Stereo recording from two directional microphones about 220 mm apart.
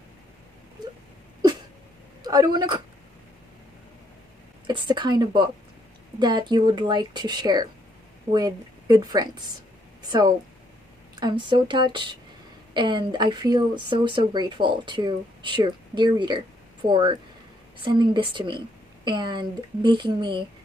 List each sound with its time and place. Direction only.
2.2 s speech: 20° right (ahead or behind)
4.6 s speech: 20° right (ahead or behind)